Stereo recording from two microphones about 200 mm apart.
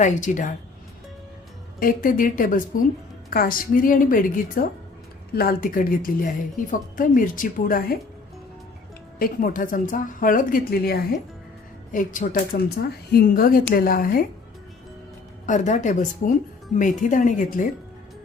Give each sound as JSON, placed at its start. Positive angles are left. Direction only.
{"t": 0.0, "sound": "speech", "side_deg": 40}
{"t": 1.8, "sound": "a woman's voice", "side_deg": 45}
{"t": 9.1, "sound": "a woman's voice", "side_deg": 45}
{"t": 15.4, "sound": "speech", "side_deg": 40}